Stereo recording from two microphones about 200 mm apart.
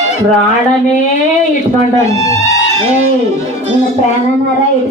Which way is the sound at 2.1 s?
15° left (ahead or behind).